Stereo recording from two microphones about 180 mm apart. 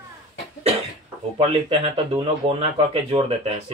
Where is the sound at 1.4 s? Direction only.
30° right (ahead or behind).